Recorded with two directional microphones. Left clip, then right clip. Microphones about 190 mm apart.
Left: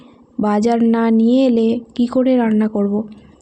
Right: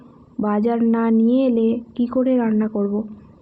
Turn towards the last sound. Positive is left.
turn(degrees=40)  # may be behind; listen again after turning